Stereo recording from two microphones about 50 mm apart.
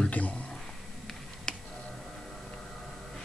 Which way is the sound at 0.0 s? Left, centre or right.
Left.